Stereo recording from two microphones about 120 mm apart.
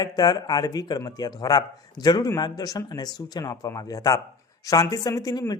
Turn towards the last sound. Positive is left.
turn(degrees=30)  # may be behind; listen again after turning